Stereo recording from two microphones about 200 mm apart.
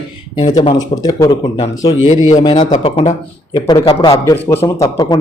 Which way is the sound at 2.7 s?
30° left (ahead or behind).